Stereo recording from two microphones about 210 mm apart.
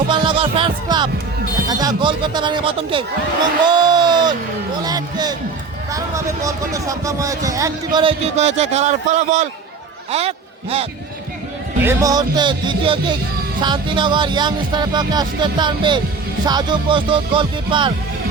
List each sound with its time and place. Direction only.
0.1 s music: 25° right (ahead or behind)
1.6 s speech: 20° right (ahead or behind)
3.6 s a sound: 20° right (ahead or behind)
5.9 s a man's voice: 15° right (ahead or behind)
11.8 s speech: 15° right (ahead or behind)